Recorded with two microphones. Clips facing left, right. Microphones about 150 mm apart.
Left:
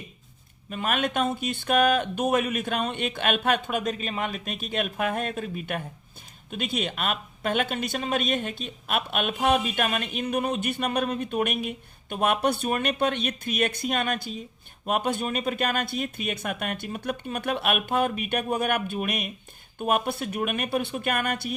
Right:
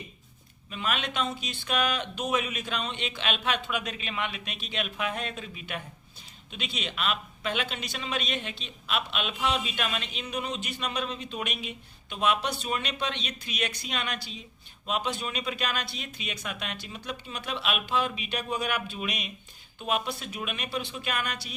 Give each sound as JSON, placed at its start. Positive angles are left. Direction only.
{"t": 0.7, "sound": "speech", "side_deg": 50}